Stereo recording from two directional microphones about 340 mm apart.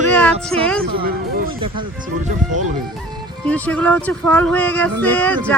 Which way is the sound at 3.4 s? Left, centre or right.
Centre.